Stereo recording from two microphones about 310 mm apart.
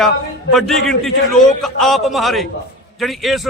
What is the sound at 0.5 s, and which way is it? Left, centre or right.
A man's voice, centre.